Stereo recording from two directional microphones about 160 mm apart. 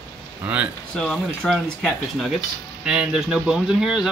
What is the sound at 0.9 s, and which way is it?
Speech, 5° left (ahead or behind).